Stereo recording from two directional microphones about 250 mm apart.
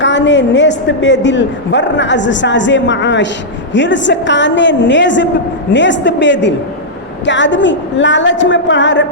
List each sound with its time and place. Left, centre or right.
0.0 s a woman's voice: left